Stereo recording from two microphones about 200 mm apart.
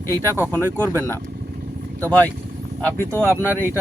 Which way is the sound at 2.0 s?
10° left (ahead or behind).